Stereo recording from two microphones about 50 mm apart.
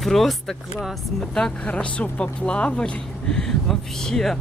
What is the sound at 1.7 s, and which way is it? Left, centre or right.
Speech, left.